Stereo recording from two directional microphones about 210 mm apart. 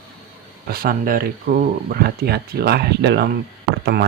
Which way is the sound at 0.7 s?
45° right (ahead or behind).